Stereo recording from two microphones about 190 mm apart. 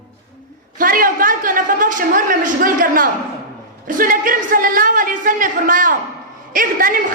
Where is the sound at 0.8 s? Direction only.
50° right (ahead or behind).